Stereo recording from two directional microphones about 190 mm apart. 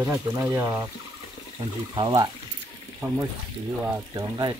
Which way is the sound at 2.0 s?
20° right (ahead or behind).